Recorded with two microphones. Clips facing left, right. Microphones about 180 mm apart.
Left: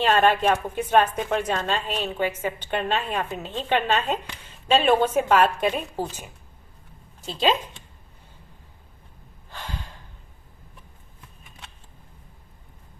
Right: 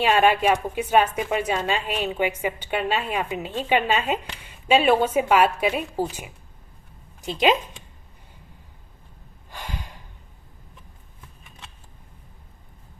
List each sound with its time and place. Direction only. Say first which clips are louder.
0.0 s a woman's voice: right 1 dB; 10° right (ahead or behind)
9.5 s gasp: right 1 dB; 10° right (ahead or behind)